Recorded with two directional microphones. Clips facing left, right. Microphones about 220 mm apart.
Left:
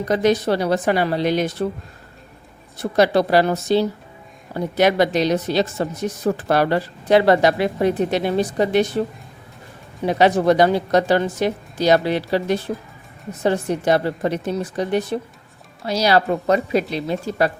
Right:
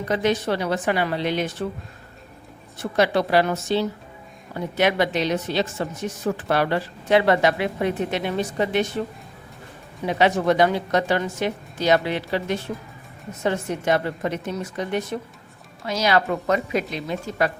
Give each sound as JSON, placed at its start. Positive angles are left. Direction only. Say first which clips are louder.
{"t": 0.1, "sound": "a woman's voice", "louder": "left 4 dB", "side_deg": 40}
{"t": 2.7, "sound": "a woman's voice", "louder": "left 4 dB", "side_deg": 35}
{"t": 10.1, "sound": "a woman's voice", "louder": "left 4 dB", "side_deg": 35}